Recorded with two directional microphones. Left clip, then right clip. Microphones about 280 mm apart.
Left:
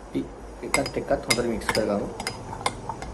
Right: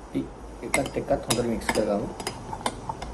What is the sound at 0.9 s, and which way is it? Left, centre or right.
Speech, centre.